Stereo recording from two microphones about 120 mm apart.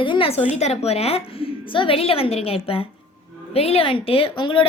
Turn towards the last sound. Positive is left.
turn(degrees=45)  # may be behind; listen again after turning